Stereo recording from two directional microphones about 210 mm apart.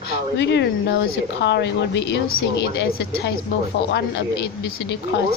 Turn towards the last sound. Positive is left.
turn(degrees=55)  # may be behind; listen again after turning